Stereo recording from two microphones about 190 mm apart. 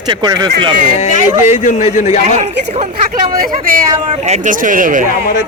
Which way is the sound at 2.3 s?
35° right (ahead or behind).